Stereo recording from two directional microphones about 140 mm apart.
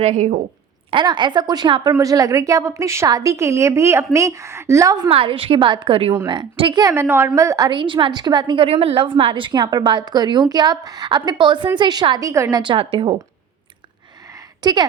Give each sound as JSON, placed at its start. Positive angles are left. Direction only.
{"t": 0.0, "sound": "a woman's voice", "side_deg": -55}
{"t": 0.9, "sound": "a woman's voice", "side_deg": -35}
{"t": 5.0, "sound": "a woman's voice", "side_deg": -40}
{"t": 6.8, "sound": "a woman's voice", "side_deg": -20}
{"t": 12.7, "sound": "a woman's voice", "side_deg": -40}
{"t": 14.3, "sound": "a sound", "side_deg": -30}